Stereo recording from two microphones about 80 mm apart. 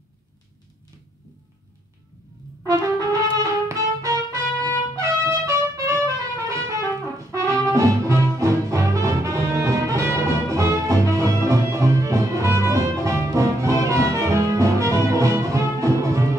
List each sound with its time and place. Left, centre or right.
2.6 s brass instrument: right
7.7 s music: right